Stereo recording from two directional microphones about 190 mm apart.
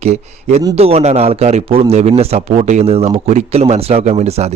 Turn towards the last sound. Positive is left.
turn(degrees=-35)  # may be behind; listen again after turning